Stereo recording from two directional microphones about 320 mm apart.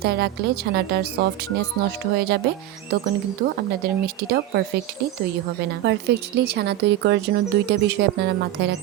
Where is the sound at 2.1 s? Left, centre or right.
Right.